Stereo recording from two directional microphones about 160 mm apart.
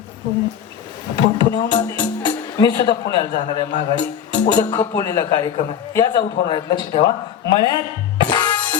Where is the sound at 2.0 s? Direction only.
30° left (ahead or behind).